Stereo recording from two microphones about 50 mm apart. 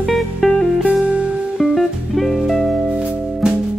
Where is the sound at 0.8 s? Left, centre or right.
Right.